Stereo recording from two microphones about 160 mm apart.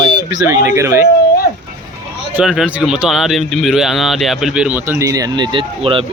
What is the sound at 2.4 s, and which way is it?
Speech, 5° right (ahead or behind).